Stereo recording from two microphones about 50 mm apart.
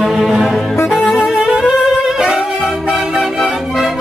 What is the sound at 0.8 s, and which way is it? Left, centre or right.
Music, centre.